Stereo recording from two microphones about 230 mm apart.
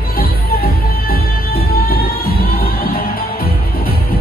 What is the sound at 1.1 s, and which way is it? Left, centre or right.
Music, left.